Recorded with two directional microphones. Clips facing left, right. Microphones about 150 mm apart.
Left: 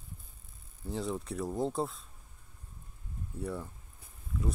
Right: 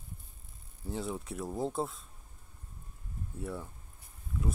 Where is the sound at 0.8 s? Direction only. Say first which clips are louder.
Left 2 dB; centre (ahead or behind).